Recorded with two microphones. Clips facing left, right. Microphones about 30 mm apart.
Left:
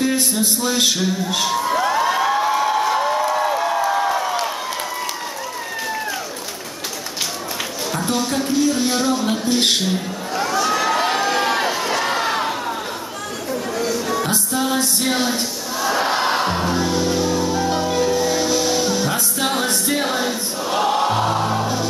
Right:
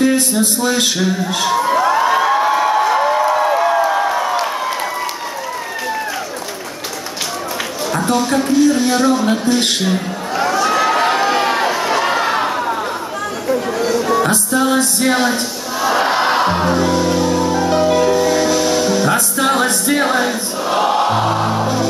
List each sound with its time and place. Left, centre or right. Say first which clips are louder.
0.0 s speech: right 5 dB; centre
1.4 s cheering: right 5 dB; centre
7.9 s music: right 6 dB; centre
9.5 s a man's voice: right 2 dB; centre
9.8 s a sound: right 4 dB; centre
13.5 s music: right 6 dB; centre